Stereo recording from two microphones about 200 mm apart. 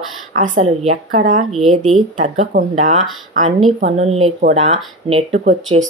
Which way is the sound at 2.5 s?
35° right (ahead or behind).